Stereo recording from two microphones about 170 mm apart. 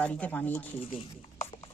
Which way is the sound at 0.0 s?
10° left (ahead or behind).